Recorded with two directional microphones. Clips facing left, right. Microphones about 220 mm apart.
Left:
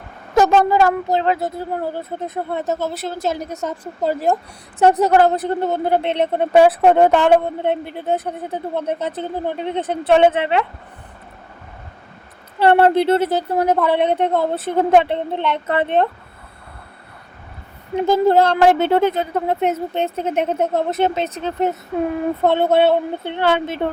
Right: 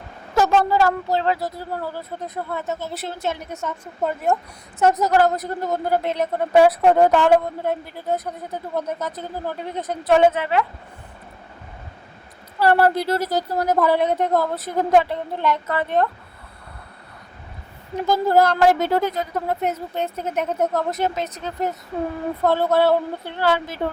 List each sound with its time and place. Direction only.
0.3 s a woman's voice: 20° left (ahead or behind)
2.8 s a woman's voice: 45° left (ahead or behind); by 10.7 s 25° left (ahead or behind)
12.5 s a woman's voice: 25° left (ahead or behind)
17.9 s a woman's voice: 25° left (ahead or behind)